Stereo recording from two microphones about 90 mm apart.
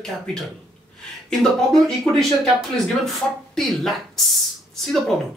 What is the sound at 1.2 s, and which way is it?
Speech, 5° left (ahead or behind).